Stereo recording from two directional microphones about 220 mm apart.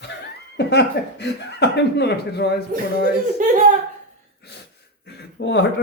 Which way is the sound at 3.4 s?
35° right (ahead or behind).